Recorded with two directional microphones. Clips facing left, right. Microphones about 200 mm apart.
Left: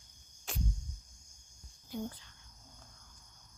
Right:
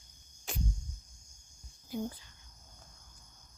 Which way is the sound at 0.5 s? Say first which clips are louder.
Right 1 dB; centre (ahead or behind).